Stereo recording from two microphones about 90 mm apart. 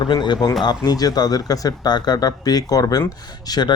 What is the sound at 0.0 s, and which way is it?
Speech, 55° left (ahead or behind).